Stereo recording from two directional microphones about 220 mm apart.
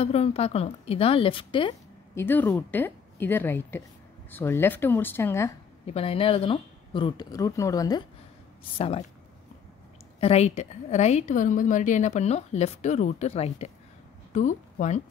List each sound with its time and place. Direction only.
0.0 s speech: 30° left (ahead or behind)
2.1 s a woman's voice: 10° left (ahead or behind)
5.9 s speech: 25° left (ahead or behind)
10.2 s a woman's voice: 30° left (ahead or behind)